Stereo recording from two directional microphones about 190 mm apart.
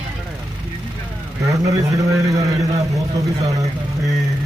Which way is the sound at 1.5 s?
15° right (ahead or behind).